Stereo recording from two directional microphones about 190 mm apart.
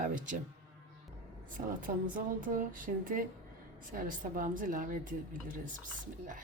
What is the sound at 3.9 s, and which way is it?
A woman's voice, 45° right (ahead or behind).